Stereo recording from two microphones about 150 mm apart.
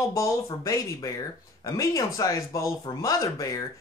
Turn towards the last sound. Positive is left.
turn(degrees=20)  # may be behind; listen again after turning